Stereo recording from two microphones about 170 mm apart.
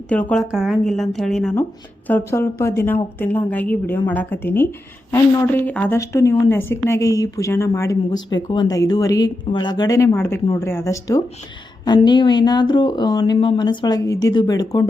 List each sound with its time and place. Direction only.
0.1 s speech: 10° left (ahead or behind)
0.5 s a woman's voice: 5° right (ahead or behind); by 14.8 s 20° left (ahead or behind)